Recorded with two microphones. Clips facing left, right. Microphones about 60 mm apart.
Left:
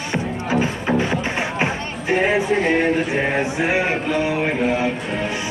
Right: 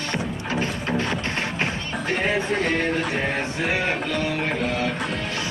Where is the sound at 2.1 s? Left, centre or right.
Centre.